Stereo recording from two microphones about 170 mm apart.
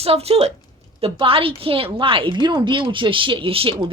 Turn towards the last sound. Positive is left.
turn(degrees=-30)  # may be behind; listen again after turning